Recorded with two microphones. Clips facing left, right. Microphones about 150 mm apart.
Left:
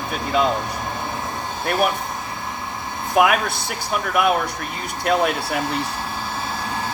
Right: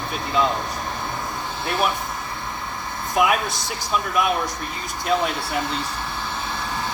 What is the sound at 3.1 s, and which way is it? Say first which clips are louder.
Speech: left 3 dB; 60° left (ahead or behind).